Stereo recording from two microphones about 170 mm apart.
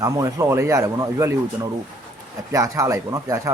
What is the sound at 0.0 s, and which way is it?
Speech, 20° right (ahead or behind).